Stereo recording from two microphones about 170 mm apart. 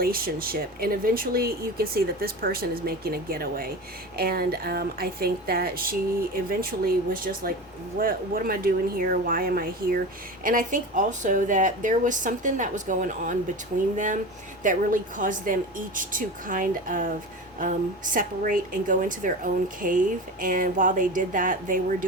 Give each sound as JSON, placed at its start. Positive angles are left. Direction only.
{"t": 0.0, "sound": "speech", "side_deg": -60}